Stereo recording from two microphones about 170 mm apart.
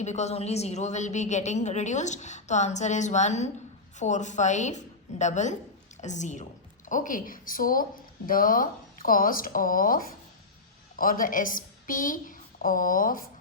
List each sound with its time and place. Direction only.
0.0 s a woman's voice: 40° left (ahead or behind)